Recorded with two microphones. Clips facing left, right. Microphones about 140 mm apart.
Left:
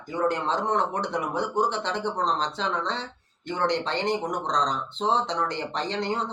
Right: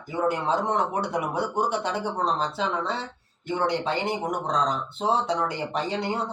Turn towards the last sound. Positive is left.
turn(degrees=-10)  # may be behind; listen again after turning